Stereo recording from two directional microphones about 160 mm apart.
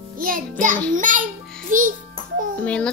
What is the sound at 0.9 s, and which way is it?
Speech, 55° right (ahead or behind).